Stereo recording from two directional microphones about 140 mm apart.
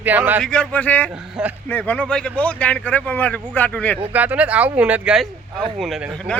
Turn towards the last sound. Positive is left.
turn(degrees=0)  # may be behind; listen again after turning